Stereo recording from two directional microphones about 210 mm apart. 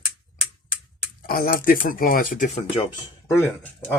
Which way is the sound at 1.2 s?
45° left (ahead or behind).